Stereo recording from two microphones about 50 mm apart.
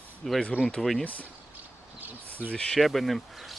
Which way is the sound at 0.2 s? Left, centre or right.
Centre.